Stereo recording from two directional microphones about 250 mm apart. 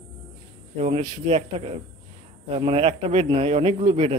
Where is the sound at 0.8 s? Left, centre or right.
Right.